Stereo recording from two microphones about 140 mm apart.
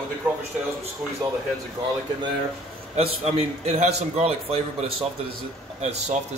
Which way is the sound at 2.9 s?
50° right (ahead or behind).